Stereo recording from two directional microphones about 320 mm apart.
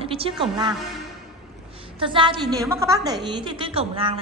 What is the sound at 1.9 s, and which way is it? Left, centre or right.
A woman's voice, centre.